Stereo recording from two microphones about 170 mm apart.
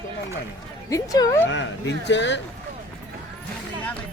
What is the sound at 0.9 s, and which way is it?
Speech, 20° left (ahead or behind).